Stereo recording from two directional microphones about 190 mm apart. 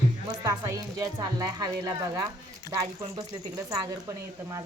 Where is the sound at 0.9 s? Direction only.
20° right (ahead or behind).